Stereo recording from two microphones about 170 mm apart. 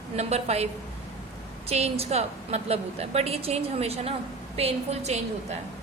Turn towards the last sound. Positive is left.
turn(degrees=-40)  # may be behind; listen again after turning